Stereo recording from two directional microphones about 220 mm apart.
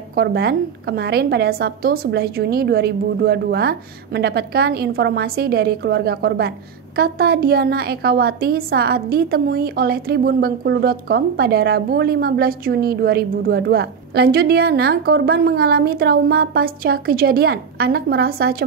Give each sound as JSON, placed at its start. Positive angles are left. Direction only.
{"t": 0.1, "sound": "a woman's voice", "side_deg": -45}